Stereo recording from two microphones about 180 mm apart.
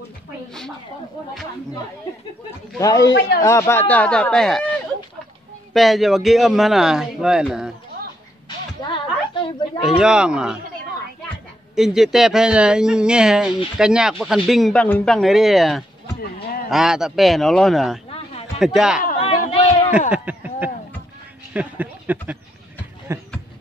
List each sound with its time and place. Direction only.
2.8 s a man's voice: 20° left (ahead or behind)
3.1 s a man's voice: 90° left
3.3 s speech: 15° left (ahead or behind)
5.7 s speech: centre (ahead or behind)
8.8 s a sound: 25° left (ahead or behind)
9.8 s speech: 5° right (ahead or behind)
11.7 s speech: centre (ahead or behind)
19.1 s a sound: 30° left (ahead or behind)
20.1 s a sound: 10° right (ahead or behind)
21.5 s speech: 10° right (ahead or behind)